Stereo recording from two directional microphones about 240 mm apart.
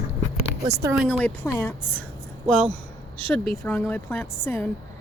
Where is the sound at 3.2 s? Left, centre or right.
Centre.